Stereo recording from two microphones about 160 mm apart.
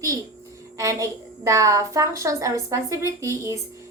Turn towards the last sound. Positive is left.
turn(degrees=-20)  # may be behind; listen again after turning